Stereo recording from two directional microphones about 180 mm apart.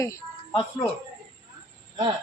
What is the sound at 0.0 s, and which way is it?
Speech, 15° left (ahead or behind).